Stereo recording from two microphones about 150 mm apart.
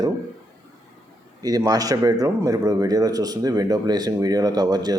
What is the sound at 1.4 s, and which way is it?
A man's voice, 25° right (ahead or behind).